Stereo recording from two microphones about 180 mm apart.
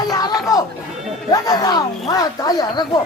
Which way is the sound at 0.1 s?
20° left (ahead or behind).